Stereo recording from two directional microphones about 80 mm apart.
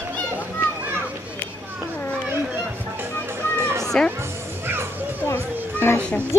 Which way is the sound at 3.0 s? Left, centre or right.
Right.